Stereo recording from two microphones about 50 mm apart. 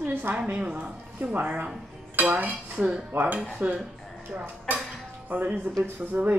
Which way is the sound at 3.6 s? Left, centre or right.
Right.